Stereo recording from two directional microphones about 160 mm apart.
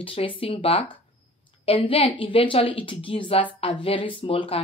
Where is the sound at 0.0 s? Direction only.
35° left (ahead or behind).